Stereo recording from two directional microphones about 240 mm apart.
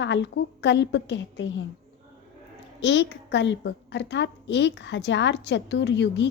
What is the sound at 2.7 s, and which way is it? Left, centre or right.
A woman's voice, left.